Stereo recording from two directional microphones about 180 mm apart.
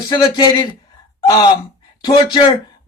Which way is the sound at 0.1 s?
25° left (ahead or behind).